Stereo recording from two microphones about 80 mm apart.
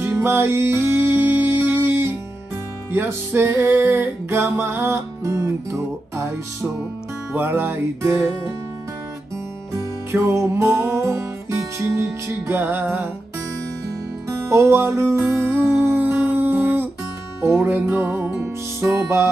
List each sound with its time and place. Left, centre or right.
0.0 s music: right
10.1 s music: right
14.4 s music: right
18.4 s music: right